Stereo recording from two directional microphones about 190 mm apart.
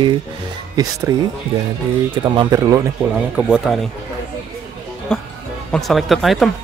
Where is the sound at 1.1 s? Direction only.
20° right (ahead or behind).